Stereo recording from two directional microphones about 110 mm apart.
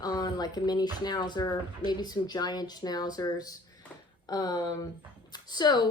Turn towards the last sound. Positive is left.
turn(degrees=40)  # may be behind; listen again after turning